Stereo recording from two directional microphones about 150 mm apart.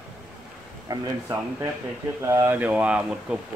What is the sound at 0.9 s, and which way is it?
Speech, 25° right (ahead or behind).